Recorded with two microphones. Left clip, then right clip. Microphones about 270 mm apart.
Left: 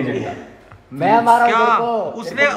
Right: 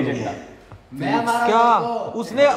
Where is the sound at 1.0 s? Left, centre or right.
Centre.